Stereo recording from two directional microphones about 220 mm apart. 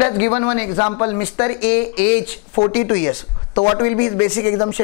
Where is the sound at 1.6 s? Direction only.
55° left (ahead or behind).